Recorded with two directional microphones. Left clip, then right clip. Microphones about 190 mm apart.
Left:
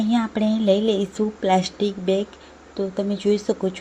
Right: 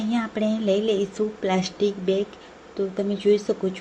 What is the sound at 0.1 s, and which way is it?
A woman's voice, 25° left (ahead or behind).